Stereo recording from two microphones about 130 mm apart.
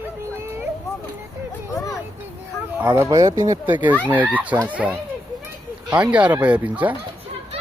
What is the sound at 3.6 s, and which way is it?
Speech, 15° right (ahead or behind).